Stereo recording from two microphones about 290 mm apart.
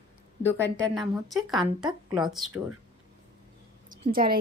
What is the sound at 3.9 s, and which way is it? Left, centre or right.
Speech, right.